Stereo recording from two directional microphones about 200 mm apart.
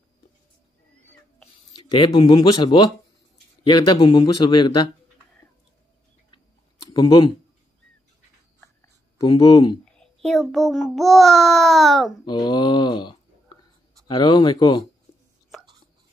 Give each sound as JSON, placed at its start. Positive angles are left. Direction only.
{"t": 1.4, "sound": "speech", "side_deg": 20}
{"t": 6.9, "sound": "speech", "side_deg": 20}
{"t": 9.2, "sound": "speech", "side_deg": 25}
{"t": 9.9, "sound": "a child's voice", "side_deg": 0}
{"t": 12.3, "sound": "speech", "side_deg": 20}